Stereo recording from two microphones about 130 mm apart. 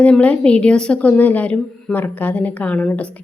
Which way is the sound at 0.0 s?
10° left (ahead or behind).